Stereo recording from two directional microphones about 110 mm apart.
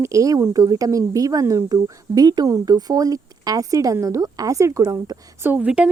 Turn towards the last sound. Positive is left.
turn(degrees=-10)  # may be behind; listen again after turning